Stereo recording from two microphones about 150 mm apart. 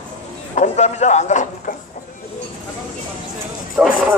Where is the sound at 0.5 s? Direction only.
50° left (ahead or behind).